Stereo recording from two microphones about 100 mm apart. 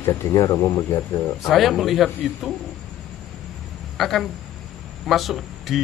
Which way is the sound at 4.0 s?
Centre (ahead or behind).